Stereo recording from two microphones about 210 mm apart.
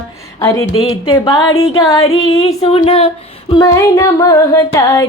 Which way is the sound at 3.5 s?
15° left (ahead or behind).